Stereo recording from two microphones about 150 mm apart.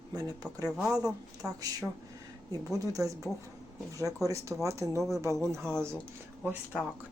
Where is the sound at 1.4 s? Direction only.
5° right (ahead or behind).